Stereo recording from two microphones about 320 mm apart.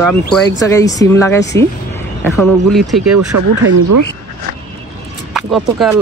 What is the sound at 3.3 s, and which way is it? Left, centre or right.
Speech, right.